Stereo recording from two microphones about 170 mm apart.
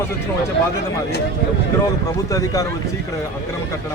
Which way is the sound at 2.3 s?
20° left (ahead or behind).